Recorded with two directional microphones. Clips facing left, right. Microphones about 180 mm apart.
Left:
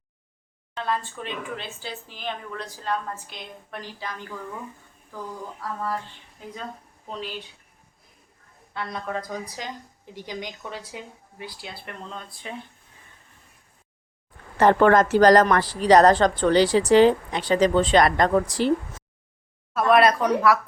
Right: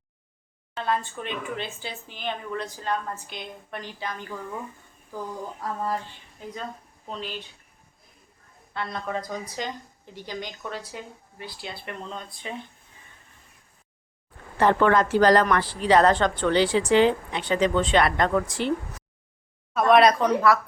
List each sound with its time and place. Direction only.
0.7 s speech: 5° right (ahead or behind)
6.4 s speech: 5° left (ahead or behind)
8.7 s speech: 5° left (ahead or behind)
11.9 s speech: centre (ahead or behind)
14.6 s a woman's voice: 45° left (ahead or behind)
19.7 s speech: 5° left (ahead or behind)